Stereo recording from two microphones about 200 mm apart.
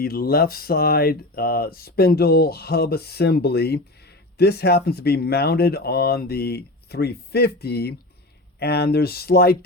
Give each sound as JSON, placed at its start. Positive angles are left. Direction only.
{"t": 0.0, "sound": "speech", "side_deg": 50}